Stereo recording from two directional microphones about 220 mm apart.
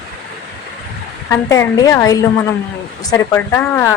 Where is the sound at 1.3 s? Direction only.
15° left (ahead or behind).